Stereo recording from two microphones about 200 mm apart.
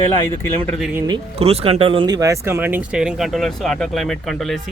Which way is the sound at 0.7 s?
5° right (ahead or behind).